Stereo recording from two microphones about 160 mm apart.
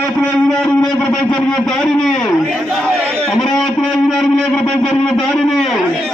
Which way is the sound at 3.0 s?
15° right (ahead or behind).